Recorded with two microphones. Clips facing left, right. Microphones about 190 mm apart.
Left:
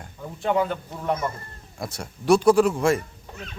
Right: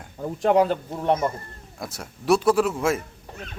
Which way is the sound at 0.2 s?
40° right (ahead or behind).